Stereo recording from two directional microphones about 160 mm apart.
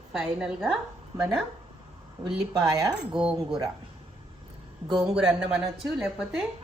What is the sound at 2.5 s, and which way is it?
Speech, 20° right (ahead or behind).